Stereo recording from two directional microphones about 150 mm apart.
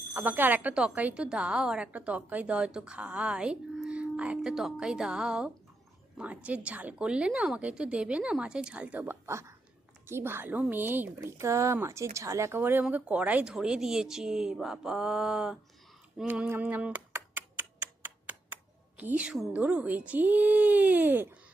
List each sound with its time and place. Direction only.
0.1 s a woman's voice: 10° right (ahead or behind)
16.1 s typing: 10° right (ahead or behind)
18.9 s a woman's voice: 10° right (ahead or behind)